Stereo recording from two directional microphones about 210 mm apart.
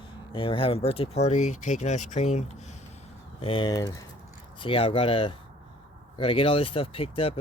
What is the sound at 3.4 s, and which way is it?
Speech, 25° left (ahead or behind).